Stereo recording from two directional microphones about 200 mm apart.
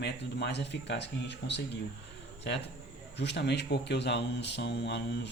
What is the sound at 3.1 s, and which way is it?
Speech, 60° left (ahead or behind).